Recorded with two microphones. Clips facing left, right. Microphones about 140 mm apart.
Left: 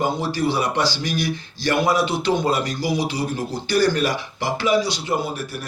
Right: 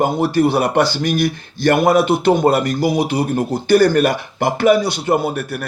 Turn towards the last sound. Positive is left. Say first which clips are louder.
# right 7 dB
turn(degrees=-55)  # may be behind; listen again after turning